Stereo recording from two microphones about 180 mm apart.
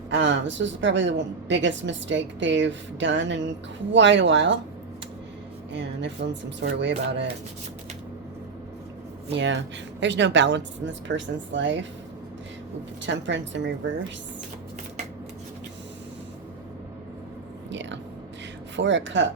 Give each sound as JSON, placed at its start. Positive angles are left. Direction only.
{"t": 0.1, "sound": "a woman's voice", "side_deg": -90}
{"t": 5.7, "sound": "speech", "side_deg": -75}
{"t": 9.3, "sound": "a woman's voice", "side_deg": -90}
{"t": 13.0, "sound": "a woman's voice", "side_deg": -85}
{"t": 17.7, "sound": "whispering", "side_deg": -90}
{"t": 18.8, "sound": "a woman's voice", "side_deg": -90}